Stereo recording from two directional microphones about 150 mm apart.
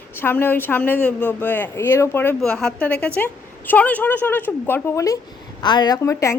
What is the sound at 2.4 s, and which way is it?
A woman's voice, 5° left (ahead or behind).